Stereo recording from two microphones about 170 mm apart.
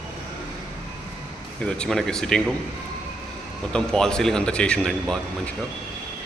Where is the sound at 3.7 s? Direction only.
5° left (ahead or behind).